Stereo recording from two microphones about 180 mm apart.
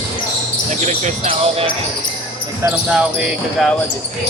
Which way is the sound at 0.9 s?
40° right (ahead or behind).